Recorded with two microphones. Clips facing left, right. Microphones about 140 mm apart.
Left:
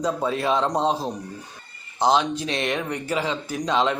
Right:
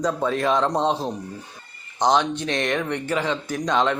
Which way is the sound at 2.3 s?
30° left (ahead or behind).